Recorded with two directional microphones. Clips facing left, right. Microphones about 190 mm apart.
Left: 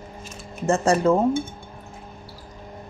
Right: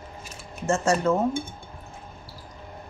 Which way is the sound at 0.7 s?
35° left (ahead or behind).